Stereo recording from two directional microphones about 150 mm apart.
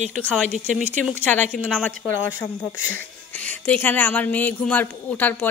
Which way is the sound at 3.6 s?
10° left (ahead or behind).